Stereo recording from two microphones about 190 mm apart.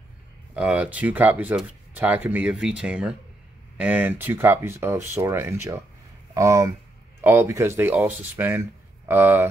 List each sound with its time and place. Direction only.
0.6 s speech: 5° right (ahead or behind)